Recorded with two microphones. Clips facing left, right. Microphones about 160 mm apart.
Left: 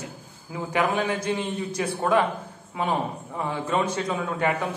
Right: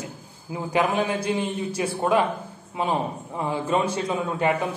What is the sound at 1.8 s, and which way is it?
Speech, 20° right (ahead or behind).